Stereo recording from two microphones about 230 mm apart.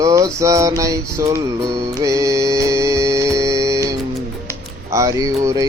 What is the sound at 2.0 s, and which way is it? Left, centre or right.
Music, centre.